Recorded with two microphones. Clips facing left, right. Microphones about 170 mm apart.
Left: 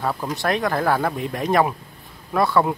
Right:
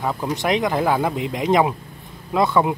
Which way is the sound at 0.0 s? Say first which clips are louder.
Right 1 dB; 15° right (ahead or behind).